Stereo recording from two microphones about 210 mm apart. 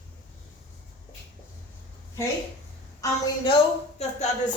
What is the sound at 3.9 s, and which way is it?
Speech, 35° left (ahead or behind).